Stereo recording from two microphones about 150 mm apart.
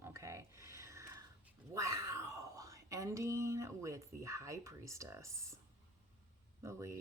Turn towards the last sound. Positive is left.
turn(degrees=-20)  # may be behind; listen again after turning